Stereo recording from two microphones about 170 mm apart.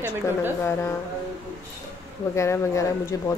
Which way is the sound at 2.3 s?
15° left (ahead or behind).